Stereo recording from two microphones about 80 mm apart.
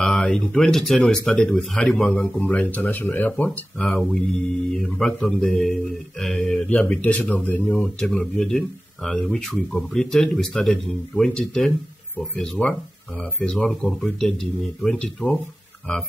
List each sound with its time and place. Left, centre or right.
0.0 s speech: centre
2.0 s speech: centre
3.9 s speech: centre; by 7.6 s left
7.6 s speech: centre